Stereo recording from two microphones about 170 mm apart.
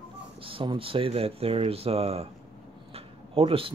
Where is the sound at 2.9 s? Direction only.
35° right (ahead or behind).